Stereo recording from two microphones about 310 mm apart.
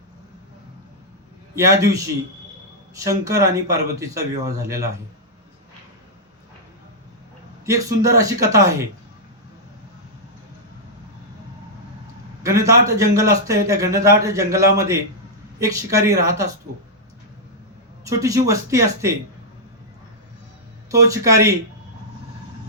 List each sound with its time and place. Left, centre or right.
1.5 s speech: centre
3.0 s speech: centre
7.6 s speech: centre
12.4 s a sound: centre
13.0 s speech: centre
18.0 s speech: centre
20.9 s speech: centre